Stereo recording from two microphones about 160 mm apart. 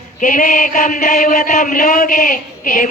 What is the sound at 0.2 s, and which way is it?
Chant, 55° left (ahead or behind).